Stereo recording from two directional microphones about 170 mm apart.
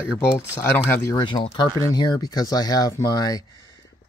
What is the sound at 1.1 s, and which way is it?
Speech, 30° left (ahead or behind).